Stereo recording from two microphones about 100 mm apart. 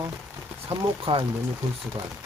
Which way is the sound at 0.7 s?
65° right (ahead or behind).